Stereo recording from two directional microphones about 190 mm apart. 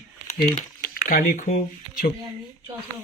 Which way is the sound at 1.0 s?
45° left (ahead or behind).